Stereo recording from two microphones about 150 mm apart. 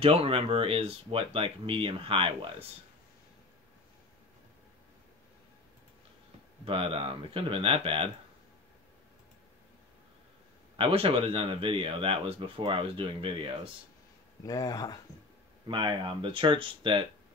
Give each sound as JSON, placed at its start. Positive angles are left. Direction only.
{"t": 0.0, "sound": "speech", "side_deg": -40}
{"t": 6.6, "sound": "speech", "side_deg": -35}
{"t": 10.8, "sound": "speech", "side_deg": -40}
{"t": 14.4, "sound": "speech", "side_deg": 25}
{"t": 15.6, "sound": "speech", "side_deg": -30}